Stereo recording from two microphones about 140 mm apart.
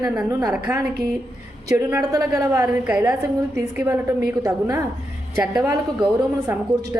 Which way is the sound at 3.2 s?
20° right (ahead or behind).